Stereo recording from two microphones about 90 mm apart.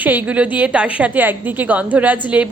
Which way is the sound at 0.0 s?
20° right (ahead or behind).